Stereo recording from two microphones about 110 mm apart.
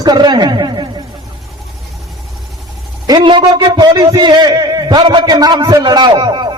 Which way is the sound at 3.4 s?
40° right (ahead or behind).